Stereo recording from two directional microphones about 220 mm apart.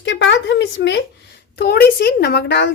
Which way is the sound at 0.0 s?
55° left (ahead or behind).